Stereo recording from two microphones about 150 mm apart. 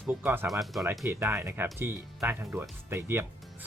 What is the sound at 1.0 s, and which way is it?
Speech, 20° right (ahead or behind).